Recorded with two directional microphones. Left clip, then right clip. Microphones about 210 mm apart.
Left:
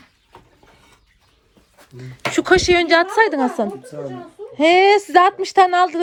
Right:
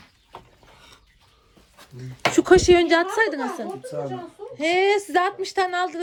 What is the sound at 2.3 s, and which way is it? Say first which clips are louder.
A woman's voice: left 1 dB; 15° right (ahead or behind).